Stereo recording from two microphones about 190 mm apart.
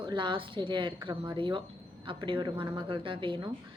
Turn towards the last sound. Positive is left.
turn(degrees=-25)  # may be behind; listen again after turning